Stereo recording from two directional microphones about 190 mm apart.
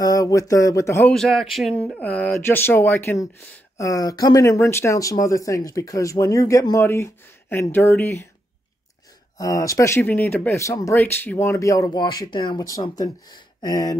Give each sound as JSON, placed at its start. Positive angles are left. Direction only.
{"t": 0.0, "sound": "speech", "side_deg": 20}
{"t": 1.1, "sound": "speech", "side_deg": 0}
{"t": 9.4, "sound": "speech", "side_deg": 15}